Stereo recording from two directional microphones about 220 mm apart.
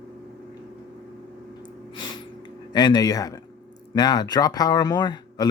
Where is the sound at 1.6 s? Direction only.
20° left (ahead or behind).